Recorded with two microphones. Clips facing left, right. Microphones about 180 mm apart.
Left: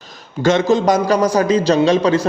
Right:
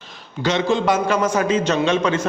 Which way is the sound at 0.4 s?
45° left (ahead or behind).